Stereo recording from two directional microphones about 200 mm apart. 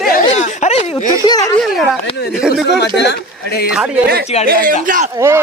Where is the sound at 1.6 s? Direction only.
Centre (ahead or behind).